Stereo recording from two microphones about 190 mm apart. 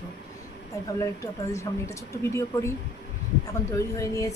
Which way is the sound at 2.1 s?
15° left (ahead or behind).